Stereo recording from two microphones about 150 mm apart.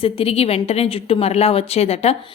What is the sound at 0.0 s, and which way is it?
A woman's voice, 40° left (ahead or behind).